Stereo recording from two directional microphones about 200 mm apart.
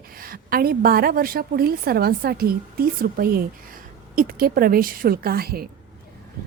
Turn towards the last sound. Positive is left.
turn(degrees=-50)  # may be behind; listen again after turning